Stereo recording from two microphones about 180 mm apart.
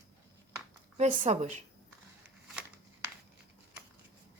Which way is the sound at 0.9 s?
40° right (ahead or behind).